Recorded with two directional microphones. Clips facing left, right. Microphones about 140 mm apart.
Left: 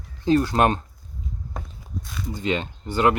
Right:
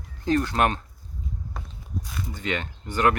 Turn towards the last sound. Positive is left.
turn(degrees=25)  # may be behind; listen again after turning